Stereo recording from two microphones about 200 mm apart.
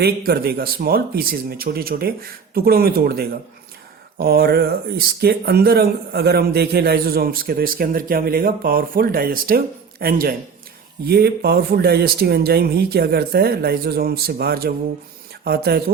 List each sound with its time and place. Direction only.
0.0 s speech: 50° right (ahead or behind)